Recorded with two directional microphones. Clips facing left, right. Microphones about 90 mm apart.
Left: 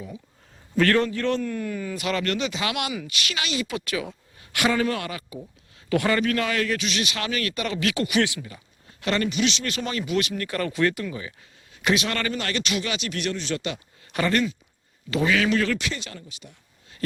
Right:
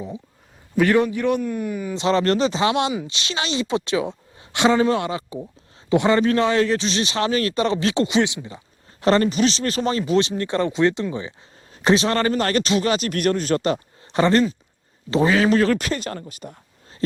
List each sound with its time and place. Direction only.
0.8 s a man's voice: 15° right (ahead or behind); by 16.6 s 45° right (ahead or behind)
17.0 s speech: 25° right (ahead or behind)